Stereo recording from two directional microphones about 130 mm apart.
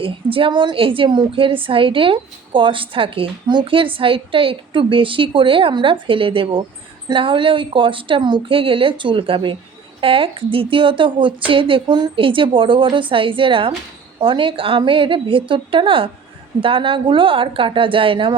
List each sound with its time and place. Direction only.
0.0 s a woman's voice: 45° right (ahead or behind)